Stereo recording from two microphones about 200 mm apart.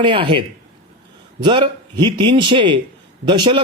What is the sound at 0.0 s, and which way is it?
A man's voice, 25° right (ahead or behind).